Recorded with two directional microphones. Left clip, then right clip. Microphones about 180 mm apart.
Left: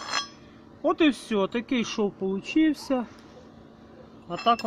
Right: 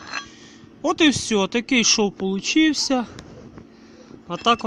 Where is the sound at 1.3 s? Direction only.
65° right (ahead or behind).